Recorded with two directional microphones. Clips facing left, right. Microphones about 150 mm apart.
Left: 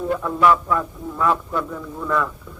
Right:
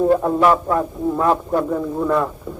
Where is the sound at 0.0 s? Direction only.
40° right (ahead or behind).